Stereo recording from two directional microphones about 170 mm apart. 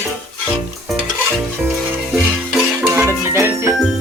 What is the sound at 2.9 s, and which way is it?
Music, 15° right (ahead or behind).